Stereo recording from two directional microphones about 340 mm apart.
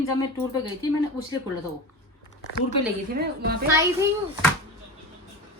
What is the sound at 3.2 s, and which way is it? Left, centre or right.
Speech, right.